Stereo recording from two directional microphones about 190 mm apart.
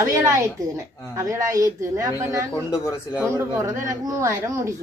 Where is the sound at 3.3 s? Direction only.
15° right (ahead or behind).